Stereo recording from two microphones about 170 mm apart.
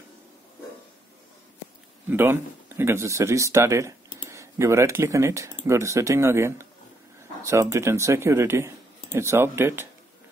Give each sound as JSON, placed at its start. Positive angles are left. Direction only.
{"t": 2.0, "sound": "speech", "side_deg": -15}